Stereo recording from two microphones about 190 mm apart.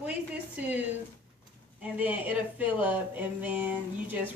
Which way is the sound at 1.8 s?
10° right (ahead or behind).